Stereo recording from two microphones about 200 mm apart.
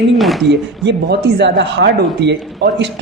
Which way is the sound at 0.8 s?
55° right (ahead or behind).